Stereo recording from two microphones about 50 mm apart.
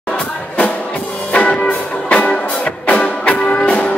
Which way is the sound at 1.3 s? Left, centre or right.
Left.